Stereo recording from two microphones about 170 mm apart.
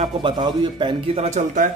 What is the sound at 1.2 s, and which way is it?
Speech, 45° right (ahead or behind).